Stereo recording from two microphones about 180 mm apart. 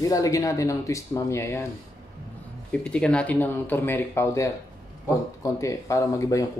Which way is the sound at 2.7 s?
5° left (ahead or behind).